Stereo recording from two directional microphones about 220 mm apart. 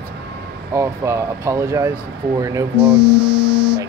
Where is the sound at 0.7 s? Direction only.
15° right (ahead or behind).